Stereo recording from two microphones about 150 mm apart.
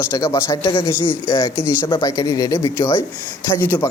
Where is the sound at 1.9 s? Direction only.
25° left (ahead or behind).